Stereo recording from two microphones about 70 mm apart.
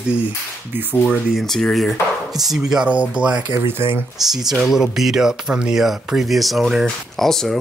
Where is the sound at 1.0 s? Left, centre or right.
Centre.